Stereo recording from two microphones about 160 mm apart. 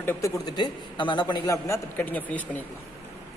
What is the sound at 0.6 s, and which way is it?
A man's voice, 30° left (ahead or behind).